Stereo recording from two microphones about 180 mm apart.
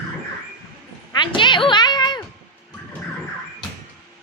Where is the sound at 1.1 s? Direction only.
25° left (ahead or behind).